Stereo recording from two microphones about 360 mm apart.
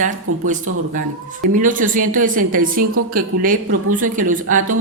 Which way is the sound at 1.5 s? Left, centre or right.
Right.